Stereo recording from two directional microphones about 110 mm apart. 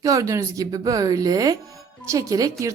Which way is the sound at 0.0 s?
30° right (ahead or behind).